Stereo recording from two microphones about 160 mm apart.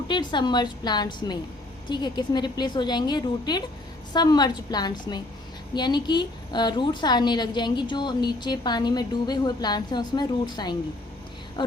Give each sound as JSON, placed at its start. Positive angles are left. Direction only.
{"t": 0.1, "sound": "a woman's voice", "side_deg": 30}